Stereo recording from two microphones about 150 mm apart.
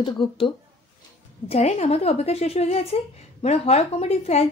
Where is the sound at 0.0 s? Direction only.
35° left (ahead or behind).